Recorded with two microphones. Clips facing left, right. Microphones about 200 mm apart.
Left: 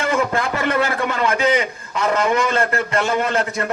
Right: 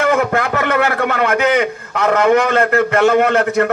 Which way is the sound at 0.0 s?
60° right (ahead or behind).